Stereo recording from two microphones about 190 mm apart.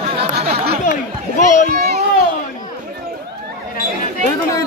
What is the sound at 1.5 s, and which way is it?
Speech, 40° left (ahead or behind).